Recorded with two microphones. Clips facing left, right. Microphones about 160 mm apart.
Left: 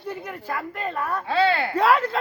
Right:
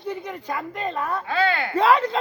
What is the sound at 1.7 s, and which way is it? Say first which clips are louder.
Speech: right 3 dB; 10° left (ahead or behind).